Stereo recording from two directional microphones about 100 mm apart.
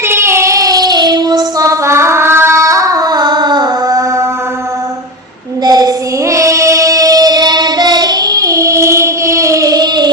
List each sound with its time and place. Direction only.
0.1 s child singing: 25° right (ahead or behind)
5.6 s child singing: 40° right (ahead or behind)